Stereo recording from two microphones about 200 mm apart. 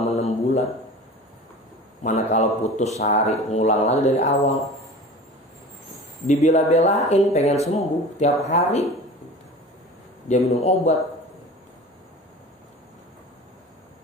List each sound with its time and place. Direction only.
0.0 s a sound: 35° left (ahead or behind)
2.0 s speech: 35° left (ahead or behind)
6.2 s speech: 35° left (ahead or behind)
10.2 s speech: 35° left (ahead or behind)